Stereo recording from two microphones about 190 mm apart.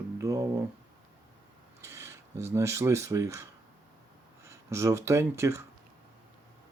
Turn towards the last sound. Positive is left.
turn(degrees=-15)  # may be behind; listen again after turning